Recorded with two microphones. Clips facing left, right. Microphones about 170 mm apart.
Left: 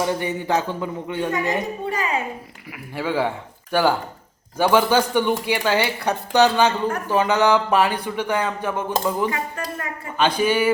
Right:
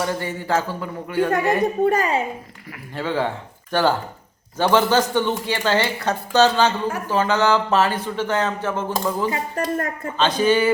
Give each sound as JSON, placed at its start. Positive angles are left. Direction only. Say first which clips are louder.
{"t": 0.0, "sound": "speech", "louder": "left 2 dB", "side_deg": 15}
{"t": 1.8, "sound": "speech", "louder": "right 8 dB", "side_deg": -45}
{"t": 2.9, "sound": "speech", "louder": "left 1 dB", "side_deg": 10}
{"t": 9.3, "sound": "speech", "louder": "right 4 dB", "side_deg": -45}
{"t": 10.2, "sound": "speech", "louder": "right 1 dB", "side_deg": 10}